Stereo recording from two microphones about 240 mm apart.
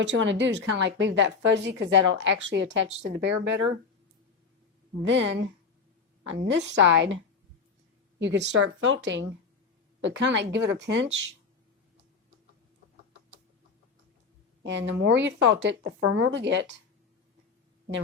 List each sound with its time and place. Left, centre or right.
0.0 s a woman's voice: right
5.0 s a woman's voice: right
8.2 s a woman's voice: right
14.6 s a woman's voice: right